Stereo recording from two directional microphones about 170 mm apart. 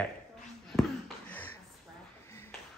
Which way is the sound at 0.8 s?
10° left (ahead or behind).